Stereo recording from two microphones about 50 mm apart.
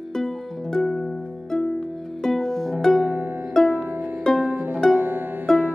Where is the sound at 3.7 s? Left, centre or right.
Right.